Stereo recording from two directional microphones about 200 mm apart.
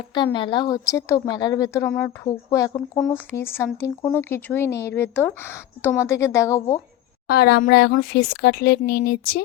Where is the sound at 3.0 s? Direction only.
Centre (ahead or behind).